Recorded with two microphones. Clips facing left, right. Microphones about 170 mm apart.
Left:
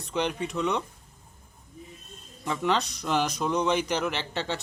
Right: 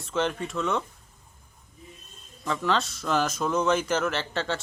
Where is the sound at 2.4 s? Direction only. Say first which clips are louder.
Even; 20° left (ahead or behind).